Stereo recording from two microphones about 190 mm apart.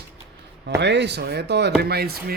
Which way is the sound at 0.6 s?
65° right (ahead or behind).